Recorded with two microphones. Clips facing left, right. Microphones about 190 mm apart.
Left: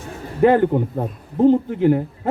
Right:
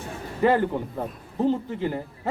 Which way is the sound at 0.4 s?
50° left (ahead or behind).